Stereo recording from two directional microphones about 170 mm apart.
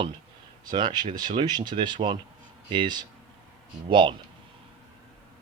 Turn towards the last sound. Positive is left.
turn(degrees=-30)  # may be behind; listen again after turning